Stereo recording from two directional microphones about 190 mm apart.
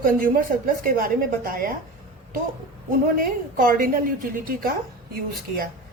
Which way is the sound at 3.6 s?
45° right (ahead or behind).